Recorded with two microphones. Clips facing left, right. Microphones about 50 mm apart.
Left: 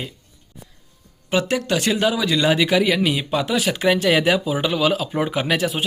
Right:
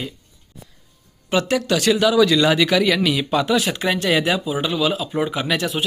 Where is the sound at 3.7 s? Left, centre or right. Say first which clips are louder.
Left 2 dB; left.